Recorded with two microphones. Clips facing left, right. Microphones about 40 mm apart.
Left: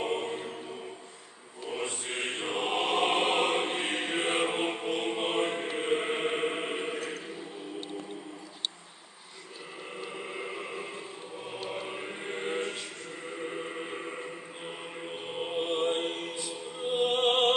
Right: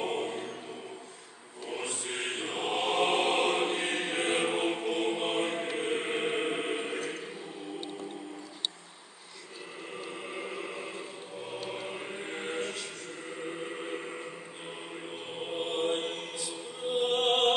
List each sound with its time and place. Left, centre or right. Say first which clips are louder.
0.0 s music: left 1 dB; centre
1.7 s chant: left 1 dB; centre
11.6 s chant: left 3 dB; centre
12.5 s music: left 1 dB; centre
15.4 s music: left 2 dB; centre